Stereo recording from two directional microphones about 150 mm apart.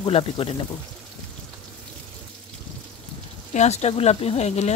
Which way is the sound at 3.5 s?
50° left (ahead or behind).